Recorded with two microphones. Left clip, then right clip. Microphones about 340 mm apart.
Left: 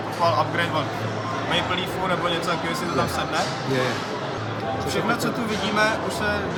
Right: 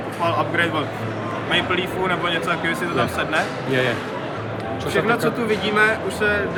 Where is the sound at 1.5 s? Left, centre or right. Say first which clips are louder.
Right 4 dB; centre.